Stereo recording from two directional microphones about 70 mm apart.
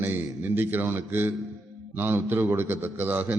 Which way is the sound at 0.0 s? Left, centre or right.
Right.